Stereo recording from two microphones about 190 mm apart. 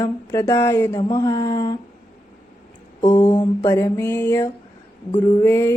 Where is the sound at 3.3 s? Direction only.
15° left (ahead or behind).